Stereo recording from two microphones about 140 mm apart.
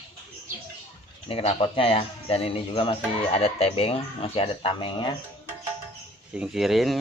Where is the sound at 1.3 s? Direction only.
45° left (ahead or behind).